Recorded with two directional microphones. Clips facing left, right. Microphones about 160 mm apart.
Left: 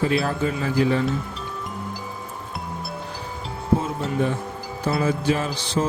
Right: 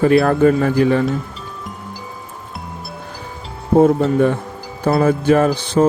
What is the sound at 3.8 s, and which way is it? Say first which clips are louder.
Speech: right 12 dB; 60° right (ahead or behind).